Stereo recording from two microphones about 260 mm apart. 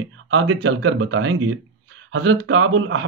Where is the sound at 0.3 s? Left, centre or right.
Right.